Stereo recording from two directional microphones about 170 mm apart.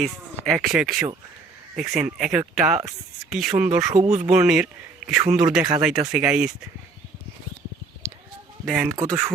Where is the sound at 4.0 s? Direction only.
40° right (ahead or behind).